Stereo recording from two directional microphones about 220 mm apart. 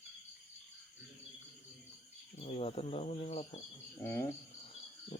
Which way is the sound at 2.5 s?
25° left (ahead or behind).